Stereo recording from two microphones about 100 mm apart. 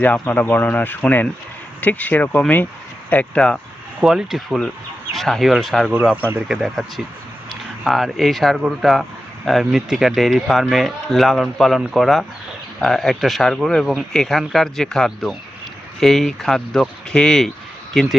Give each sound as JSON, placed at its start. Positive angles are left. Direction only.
{"t": 0.0, "sound": "speech", "side_deg": 15}
{"t": 4.0, "sound": "speech", "side_deg": -5}
{"t": 5.9, "sound": "speech", "side_deg": -20}
{"t": 6.5, "sound": "speech", "side_deg": 0}